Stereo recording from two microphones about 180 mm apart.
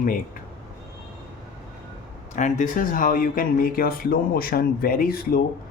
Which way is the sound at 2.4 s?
45° left (ahead or behind).